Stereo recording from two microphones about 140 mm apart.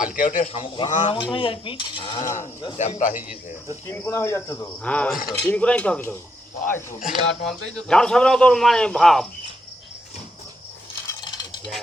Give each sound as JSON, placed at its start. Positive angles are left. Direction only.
{"t": 0.0, "sound": "speech", "side_deg": 70}
{"t": 0.4, "sound": "speech", "side_deg": 50}
{"t": 0.9, "sound": "speech", "side_deg": 65}
{"t": 1.1, "sound": "speech", "side_deg": 35}
{"t": 2.7, "sound": "speech", "side_deg": 65}
{"t": 3.8, "sound": "speech", "side_deg": 15}
{"t": 4.8, "sound": "speech", "side_deg": 10}
{"t": 7.0, "sound": "speech", "side_deg": 0}
{"t": 11.2, "sound": "a sound", "side_deg": 30}